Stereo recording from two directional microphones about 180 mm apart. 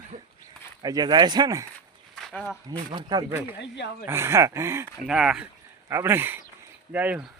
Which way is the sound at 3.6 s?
75° left (ahead or behind).